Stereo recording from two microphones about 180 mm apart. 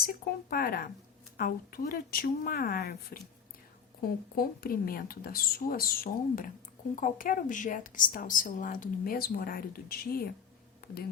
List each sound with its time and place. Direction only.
0.0 s speech: 55° left (ahead or behind)
4.4 s a woman's voice: 55° left (ahead or behind)